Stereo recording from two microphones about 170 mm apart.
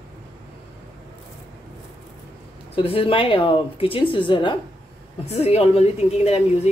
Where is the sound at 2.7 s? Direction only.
35° left (ahead or behind).